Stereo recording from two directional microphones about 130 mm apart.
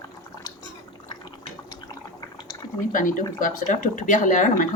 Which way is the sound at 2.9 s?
90° left.